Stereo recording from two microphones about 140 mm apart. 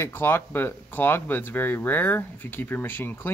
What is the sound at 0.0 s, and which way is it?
Speech, 15° left (ahead or behind).